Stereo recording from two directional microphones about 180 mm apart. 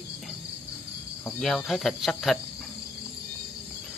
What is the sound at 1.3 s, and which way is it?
Speech, centre (ahead or behind).